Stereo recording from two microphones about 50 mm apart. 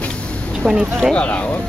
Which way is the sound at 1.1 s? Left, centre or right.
Left.